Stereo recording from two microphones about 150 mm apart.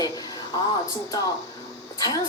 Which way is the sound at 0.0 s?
25° left (ahead or behind).